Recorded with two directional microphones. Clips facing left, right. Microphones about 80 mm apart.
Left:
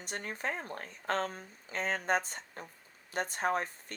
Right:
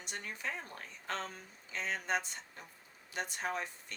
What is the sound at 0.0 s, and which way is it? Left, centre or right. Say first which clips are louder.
Speech: left 4 dB; left.